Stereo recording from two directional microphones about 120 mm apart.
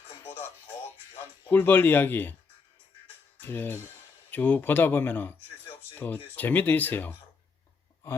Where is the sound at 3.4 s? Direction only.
15° left (ahead or behind).